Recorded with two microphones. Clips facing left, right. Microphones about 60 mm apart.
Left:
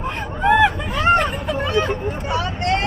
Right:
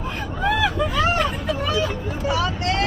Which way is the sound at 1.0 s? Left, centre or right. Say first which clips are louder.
Left 4 dB; left.